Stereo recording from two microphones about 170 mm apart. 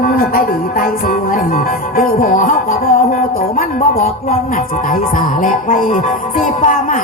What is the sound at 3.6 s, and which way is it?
Speech, 55° left (ahead or behind).